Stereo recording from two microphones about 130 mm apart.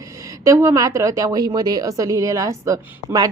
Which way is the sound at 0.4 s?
25° right (ahead or behind).